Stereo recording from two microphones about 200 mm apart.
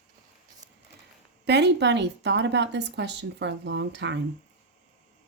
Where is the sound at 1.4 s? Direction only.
55° right (ahead or behind).